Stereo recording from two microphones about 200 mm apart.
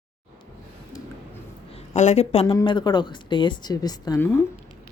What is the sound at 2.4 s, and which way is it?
Speech, 20° left (ahead or behind).